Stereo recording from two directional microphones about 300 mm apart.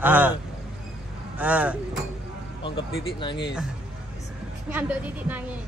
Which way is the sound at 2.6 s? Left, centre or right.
Centre.